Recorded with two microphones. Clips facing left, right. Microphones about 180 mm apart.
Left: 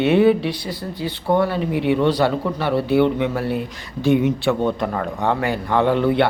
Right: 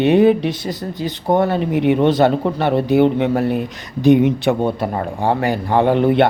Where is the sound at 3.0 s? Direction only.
40° right (ahead or behind).